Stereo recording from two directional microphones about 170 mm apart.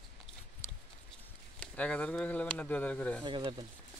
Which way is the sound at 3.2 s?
30° right (ahead or behind).